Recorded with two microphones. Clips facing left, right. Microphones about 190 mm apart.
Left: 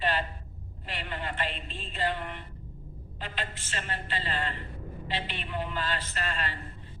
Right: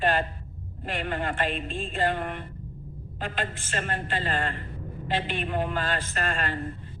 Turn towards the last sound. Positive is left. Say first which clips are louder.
# right 5 dB
turn(degrees=-50)  # may be behind; listen again after turning